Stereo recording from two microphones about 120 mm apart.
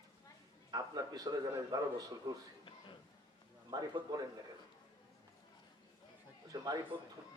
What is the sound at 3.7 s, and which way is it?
Speech, 30° right (ahead or behind).